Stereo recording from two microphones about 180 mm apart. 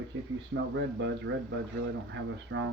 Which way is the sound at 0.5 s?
85° right.